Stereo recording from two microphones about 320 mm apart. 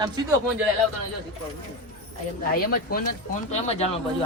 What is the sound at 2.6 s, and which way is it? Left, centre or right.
Speech, left.